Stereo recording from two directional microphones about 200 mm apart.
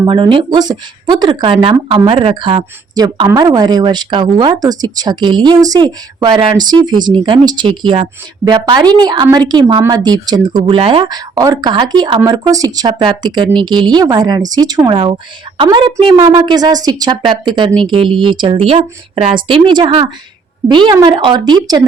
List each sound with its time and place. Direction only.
0.0 s speech: 25° right (ahead or behind)